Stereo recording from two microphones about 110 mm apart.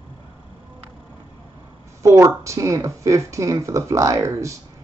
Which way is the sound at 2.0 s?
25° right (ahead or behind).